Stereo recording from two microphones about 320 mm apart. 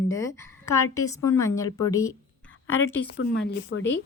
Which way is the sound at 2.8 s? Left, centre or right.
Left.